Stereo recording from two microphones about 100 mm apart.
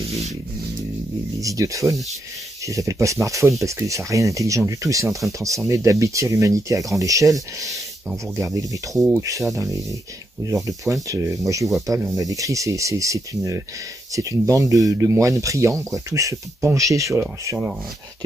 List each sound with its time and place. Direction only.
1.4 s speech: 35° right (ahead or behind)
5.2 s speech: 20° right (ahead or behind)
12.0 s speech: centre (ahead or behind)
12.3 s speech: 35° right (ahead or behind)